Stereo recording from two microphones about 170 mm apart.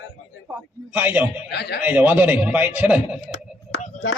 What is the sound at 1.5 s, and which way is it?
Speech, 75° left (ahead or behind).